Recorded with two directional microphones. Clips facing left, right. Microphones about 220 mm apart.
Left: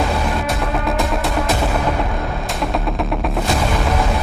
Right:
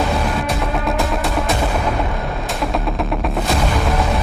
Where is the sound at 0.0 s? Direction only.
Centre (ahead or behind).